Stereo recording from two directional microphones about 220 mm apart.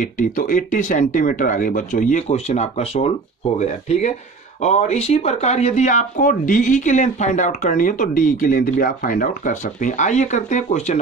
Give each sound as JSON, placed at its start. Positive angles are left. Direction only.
{"t": 0.0, "sound": "speech", "side_deg": 40}